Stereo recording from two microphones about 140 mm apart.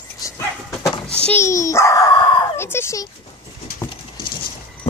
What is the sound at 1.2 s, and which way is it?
Speech, 15° left (ahead or behind).